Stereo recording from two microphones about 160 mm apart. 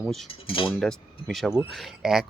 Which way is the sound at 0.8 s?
Centre (ahead or behind).